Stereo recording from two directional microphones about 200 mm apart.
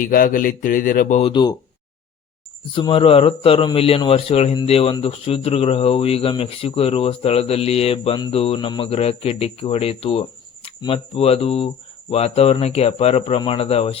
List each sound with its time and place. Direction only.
0.0 s speech: 45° left (ahead or behind)
1.3 s a man's voice: 20° left (ahead or behind)
2.7 s a man's voice: 25° left (ahead or behind)